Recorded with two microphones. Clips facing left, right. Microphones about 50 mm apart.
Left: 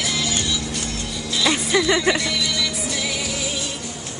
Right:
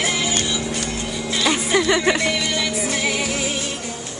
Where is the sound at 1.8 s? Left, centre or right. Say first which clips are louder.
Right 1 dB; centre.